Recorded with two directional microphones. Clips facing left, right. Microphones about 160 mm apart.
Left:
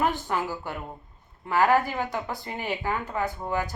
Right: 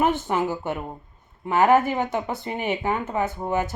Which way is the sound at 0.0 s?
20° right (ahead or behind).